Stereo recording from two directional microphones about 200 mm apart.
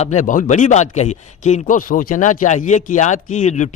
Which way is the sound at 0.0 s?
35° left (ahead or behind).